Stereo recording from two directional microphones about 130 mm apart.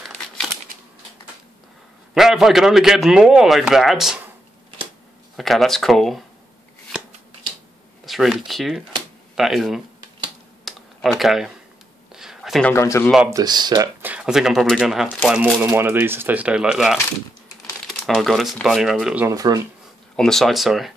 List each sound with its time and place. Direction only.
0.0 s crumpling: centre (ahead or behind)
2.1 s a man's voice: centre (ahead or behind)
5.3 s a man's voice: centre (ahead or behind)
8.0 s speech: centre (ahead or behind)
10.6 s computer keyboard: centre (ahead or behind)
12.1 s a sound: 5° right (ahead or behind)
12.7 s speech: 20° left (ahead or behind)
13.3 s speech: 30° right (ahead or behind)
14.0 s a man's voice: 5° right (ahead or behind)
15.6 s a man's voice: 15° right (ahead or behind)
19.2 s speech: 30° right (ahead or behind)
20.2 s a man's voice: 5° left (ahead or behind)